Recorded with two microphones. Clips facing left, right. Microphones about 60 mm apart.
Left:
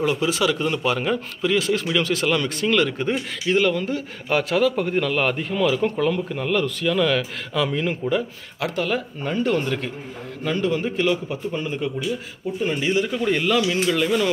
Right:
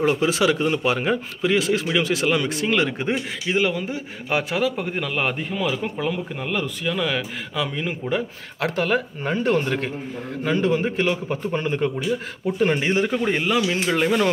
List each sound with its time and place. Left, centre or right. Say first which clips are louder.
0.0 s a man's voice: right 2 dB; right; by 8.1 s centre
8.1 s speech: left 1 dB; right
12.4 s speech: right 4 dB; right
12.7 s speech: right 1 dB; right
13.3 s speech: left 1 dB; right